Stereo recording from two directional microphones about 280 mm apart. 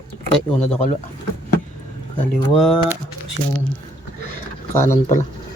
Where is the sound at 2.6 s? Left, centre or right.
Centre.